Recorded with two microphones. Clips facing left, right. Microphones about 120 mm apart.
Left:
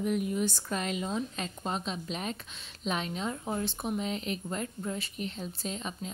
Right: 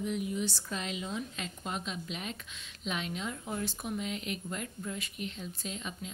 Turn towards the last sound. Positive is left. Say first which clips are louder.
# left 4 dB
turn(degrees=40)  # may be behind; listen again after turning